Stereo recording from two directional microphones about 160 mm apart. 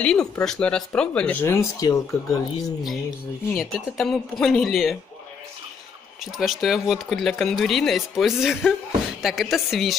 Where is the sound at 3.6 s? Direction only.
Centre (ahead or behind).